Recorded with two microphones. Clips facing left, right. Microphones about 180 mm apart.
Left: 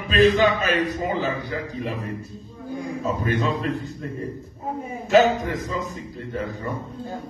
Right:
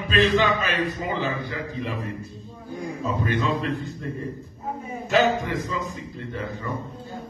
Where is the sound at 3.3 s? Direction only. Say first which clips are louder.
Left 1 dB; 45° left (ahead or behind).